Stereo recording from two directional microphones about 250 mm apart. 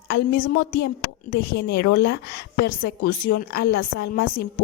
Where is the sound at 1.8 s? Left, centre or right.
Left.